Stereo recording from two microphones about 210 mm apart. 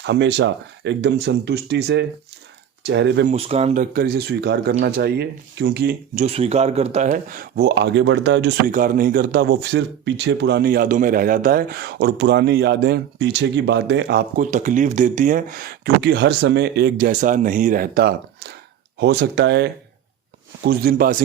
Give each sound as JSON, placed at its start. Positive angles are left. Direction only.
{"t": 0.0, "sound": "speech", "side_deg": -55}
{"t": 3.2, "sound": "speech", "side_deg": -30}
{"t": 3.9, "sound": "speech", "side_deg": -45}
{"t": 6.2, "sound": "speech", "side_deg": -30}